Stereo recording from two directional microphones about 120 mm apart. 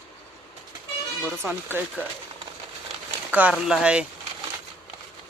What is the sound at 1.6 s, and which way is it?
Speech, 15° right (ahead or behind).